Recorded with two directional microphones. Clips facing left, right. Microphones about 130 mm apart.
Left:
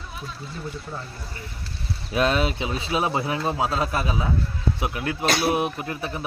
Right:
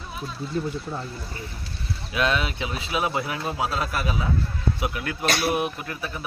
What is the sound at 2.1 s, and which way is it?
Speech, 35° left (ahead or behind).